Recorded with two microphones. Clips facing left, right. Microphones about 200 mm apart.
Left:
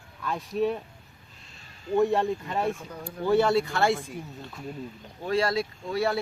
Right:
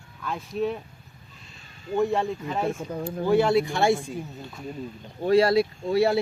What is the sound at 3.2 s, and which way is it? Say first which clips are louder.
Speech: right 1 dB; 10° right (ahead or behind).